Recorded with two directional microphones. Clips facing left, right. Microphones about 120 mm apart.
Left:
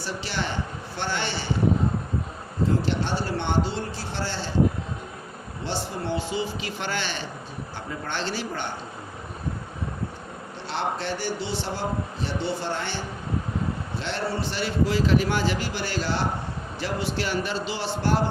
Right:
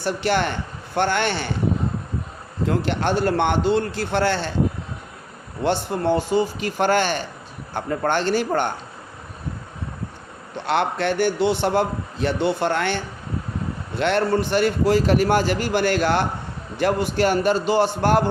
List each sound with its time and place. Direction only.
0.0 s a man's voice: 55° right (ahead or behind)
2.6 s a man's voice: 60° right (ahead or behind)
5.6 s a man's voice: 55° right (ahead or behind)
10.7 s a man's voice: 60° right (ahead or behind)